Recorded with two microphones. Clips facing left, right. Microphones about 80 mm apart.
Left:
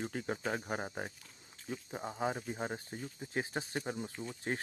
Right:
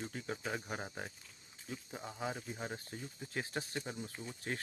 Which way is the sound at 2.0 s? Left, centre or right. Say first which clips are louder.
Left 5 dB; left.